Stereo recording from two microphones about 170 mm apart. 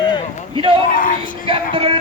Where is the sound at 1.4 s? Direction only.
30° right (ahead or behind).